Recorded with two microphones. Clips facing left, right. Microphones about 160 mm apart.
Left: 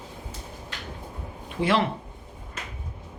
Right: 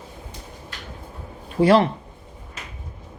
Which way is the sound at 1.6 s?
40° right (ahead or behind).